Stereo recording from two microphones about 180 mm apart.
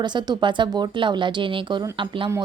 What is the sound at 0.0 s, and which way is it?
A woman's voice, 25° right (ahead or behind).